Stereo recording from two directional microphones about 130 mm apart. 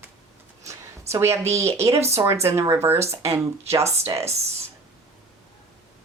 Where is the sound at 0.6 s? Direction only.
20° right (ahead or behind).